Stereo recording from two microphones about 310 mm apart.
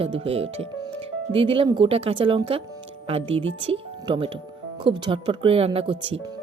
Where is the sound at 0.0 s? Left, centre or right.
Centre.